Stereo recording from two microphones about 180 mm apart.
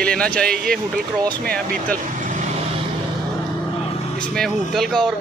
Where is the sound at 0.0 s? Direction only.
5° left (ahead or behind).